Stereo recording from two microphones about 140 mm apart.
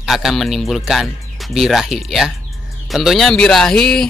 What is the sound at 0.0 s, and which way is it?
Speech, centre (ahead or behind).